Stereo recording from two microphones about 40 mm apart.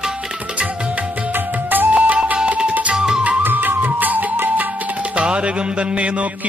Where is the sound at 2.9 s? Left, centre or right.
Centre.